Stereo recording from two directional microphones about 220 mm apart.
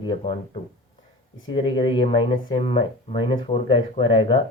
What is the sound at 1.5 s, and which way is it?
Speech, 20° left (ahead or behind).